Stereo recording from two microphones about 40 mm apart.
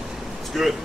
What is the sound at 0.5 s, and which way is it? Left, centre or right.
Speech, centre.